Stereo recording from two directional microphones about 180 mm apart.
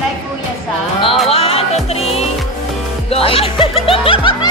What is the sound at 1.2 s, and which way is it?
Music, 30° left (ahead or behind).